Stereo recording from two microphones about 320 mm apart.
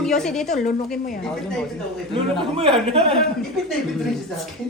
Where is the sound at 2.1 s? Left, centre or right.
Centre.